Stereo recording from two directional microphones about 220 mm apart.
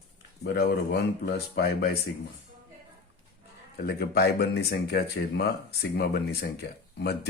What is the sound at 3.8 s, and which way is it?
Speech, 45° left (ahead or behind).